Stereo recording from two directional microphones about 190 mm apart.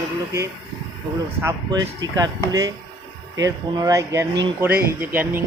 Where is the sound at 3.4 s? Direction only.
15° right (ahead or behind).